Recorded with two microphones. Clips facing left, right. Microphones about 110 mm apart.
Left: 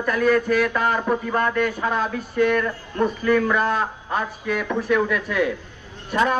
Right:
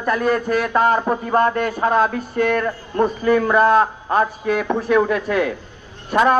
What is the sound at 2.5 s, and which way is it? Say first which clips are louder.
A man's voice: right 3 dB; 35° right (ahead or behind).